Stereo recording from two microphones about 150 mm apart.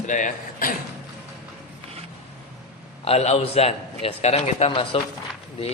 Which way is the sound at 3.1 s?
45° left (ahead or behind).